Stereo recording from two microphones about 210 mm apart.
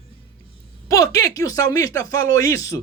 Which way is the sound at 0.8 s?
15° left (ahead or behind).